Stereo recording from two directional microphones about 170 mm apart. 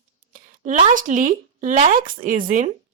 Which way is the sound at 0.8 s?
50° right (ahead or behind).